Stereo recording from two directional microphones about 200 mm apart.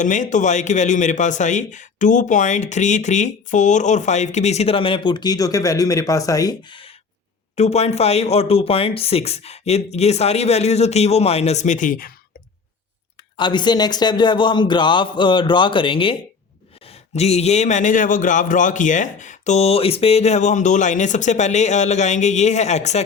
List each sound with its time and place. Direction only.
0.0 s speech: 40° left (ahead or behind)
13.3 s speech: 25° left (ahead or behind)
17.2 s speech: 30° left (ahead or behind)